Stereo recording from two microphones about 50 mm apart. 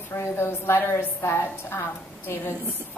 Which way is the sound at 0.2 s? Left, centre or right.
Left.